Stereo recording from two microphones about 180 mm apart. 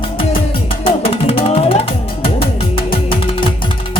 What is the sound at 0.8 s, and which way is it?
Music, 30° left (ahead or behind).